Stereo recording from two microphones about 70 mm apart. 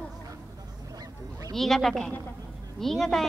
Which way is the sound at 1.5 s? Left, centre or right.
Centre.